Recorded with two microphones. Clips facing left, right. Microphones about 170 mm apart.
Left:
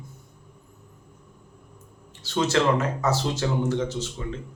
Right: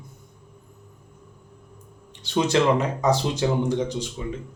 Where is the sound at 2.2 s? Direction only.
15° right (ahead or behind).